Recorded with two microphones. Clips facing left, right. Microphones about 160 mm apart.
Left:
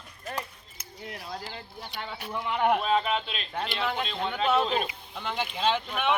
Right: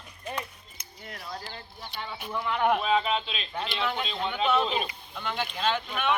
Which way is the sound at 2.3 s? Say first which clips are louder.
Even; 15° left (ahead or behind).